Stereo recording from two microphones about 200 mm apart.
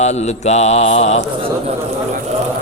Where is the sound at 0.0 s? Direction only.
35° left (ahead or behind).